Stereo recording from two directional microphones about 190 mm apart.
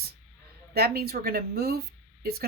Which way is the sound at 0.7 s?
55° right (ahead or behind).